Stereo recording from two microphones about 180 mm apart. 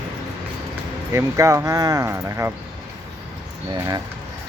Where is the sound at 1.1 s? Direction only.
15° right (ahead or behind).